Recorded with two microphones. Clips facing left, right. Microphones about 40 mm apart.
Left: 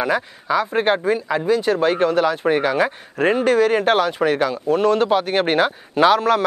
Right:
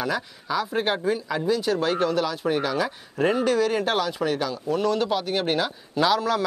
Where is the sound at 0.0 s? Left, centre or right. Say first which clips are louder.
Left 6 dB; left.